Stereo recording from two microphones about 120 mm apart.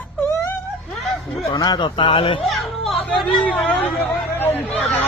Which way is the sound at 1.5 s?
35° left (ahead or behind).